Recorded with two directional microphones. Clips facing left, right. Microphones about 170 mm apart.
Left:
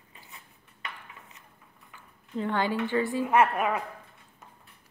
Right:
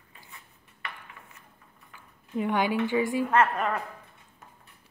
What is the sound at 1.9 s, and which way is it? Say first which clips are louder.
Speech: right 2 dB; 15° right (ahead or behind).